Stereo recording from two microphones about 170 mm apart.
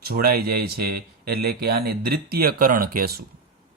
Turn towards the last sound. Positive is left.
turn(degrees=-60)  # may be behind; listen again after turning